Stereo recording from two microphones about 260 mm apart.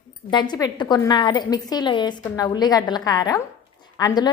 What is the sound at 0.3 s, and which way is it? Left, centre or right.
Speech, centre.